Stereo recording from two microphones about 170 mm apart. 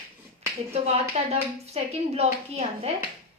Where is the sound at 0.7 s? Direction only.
40° right (ahead or behind).